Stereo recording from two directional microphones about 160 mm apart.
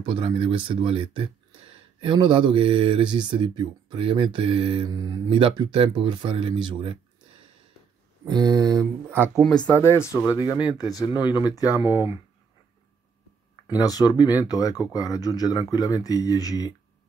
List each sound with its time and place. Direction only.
0.0 s speech: 35° right (ahead or behind)
8.3 s speech: 25° right (ahead or behind)
9.3 s speech: 5° left (ahead or behind)
9.7 s speech: 15° left (ahead or behind)
10.4 s speech: 25° left (ahead or behind)
11.9 s speech: 15° right (ahead or behind)
13.7 s speech: 25° left (ahead or behind)